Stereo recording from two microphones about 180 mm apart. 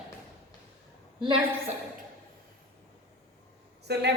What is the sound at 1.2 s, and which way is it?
Speech, 30° right (ahead or behind).